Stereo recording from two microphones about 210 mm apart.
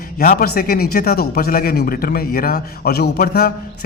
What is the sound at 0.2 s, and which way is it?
A man's voice, 45° left (ahead or behind).